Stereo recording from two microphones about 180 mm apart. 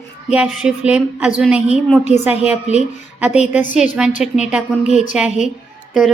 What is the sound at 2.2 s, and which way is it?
Speech, 10° right (ahead or behind).